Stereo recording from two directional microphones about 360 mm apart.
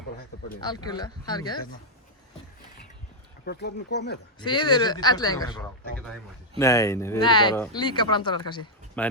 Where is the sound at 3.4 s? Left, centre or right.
Left.